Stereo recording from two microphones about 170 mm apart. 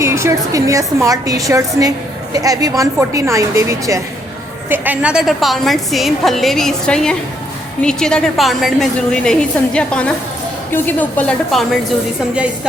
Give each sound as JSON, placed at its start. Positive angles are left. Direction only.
{"t": 0.0, "sound": "a woman's voice", "side_deg": -15}